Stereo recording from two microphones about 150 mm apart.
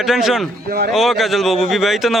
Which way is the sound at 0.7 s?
90° right.